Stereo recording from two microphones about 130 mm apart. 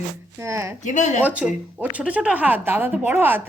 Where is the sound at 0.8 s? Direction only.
70° left (ahead or behind).